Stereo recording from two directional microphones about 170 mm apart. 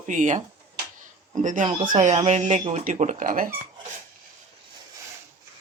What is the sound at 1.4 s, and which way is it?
Speech, 45° right (ahead or behind).